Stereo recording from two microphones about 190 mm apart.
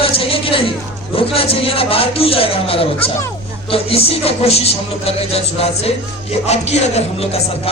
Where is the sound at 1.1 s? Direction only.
30° left (ahead or behind).